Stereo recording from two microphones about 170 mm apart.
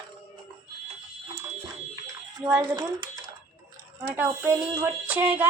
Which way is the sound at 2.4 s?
5° right (ahead or behind).